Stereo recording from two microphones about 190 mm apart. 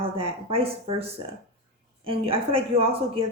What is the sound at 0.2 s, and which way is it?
Speech, 30° right (ahead or behind).